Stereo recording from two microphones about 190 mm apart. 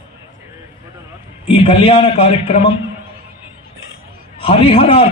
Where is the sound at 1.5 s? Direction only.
30° left (ahead or behind).